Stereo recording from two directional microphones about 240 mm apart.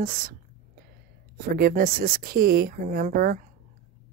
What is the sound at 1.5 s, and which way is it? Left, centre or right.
Speech, right.